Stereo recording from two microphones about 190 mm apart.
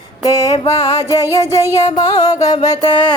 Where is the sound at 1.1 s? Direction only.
15° left (ahead or behind).